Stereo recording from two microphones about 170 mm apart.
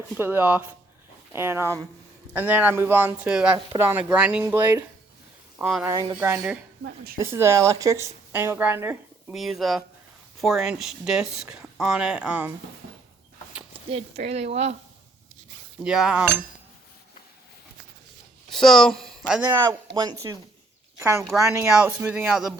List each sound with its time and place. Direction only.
0.1 s a woman's voice: 10° right (ahead or behind)
5.9 s a woman's voice: 20° right (ahead or behind)
6.8 s a woman's voice: 65° right (ahead or behind)
7.2 s a woman's voice: 15° right (ahead or behind)
9.3 s speech: centre (ahead or behind)
13.7 s speech: 35° right (ahead or behind)
15.8 s speech: 5° right (ahead or behind)
18.5 s speech: centre (ahead or behind)
19.5 s a woman's voice: 25° right (ahead or behind); by 22.5 s centre (ahead or behind)